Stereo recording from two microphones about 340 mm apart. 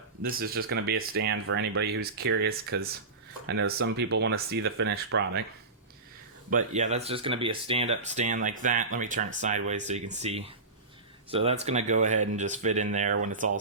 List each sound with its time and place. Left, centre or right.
0.3 s speech: right
6.5 s speech: right